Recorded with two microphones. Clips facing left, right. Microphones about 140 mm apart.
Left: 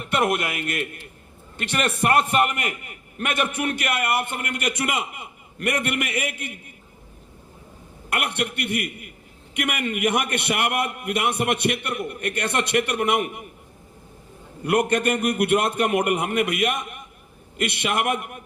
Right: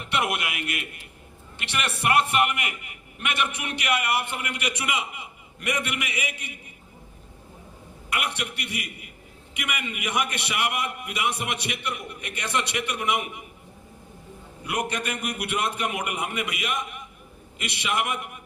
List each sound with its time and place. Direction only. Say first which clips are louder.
0.1 s a man's voice: left 5 dB; 45° left (ahead or behind)
8.1 s a man's voice: left 4 dB; 55° left (ahead or behind)
14.6 s a man's voice: left 8 dB; 55° left (ahead or behind)